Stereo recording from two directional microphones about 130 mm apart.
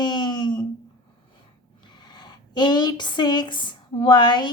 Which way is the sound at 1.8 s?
35° left (ahead or behind).